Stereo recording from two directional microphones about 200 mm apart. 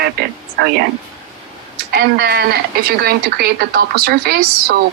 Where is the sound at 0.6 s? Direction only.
55° right (ahead or behind).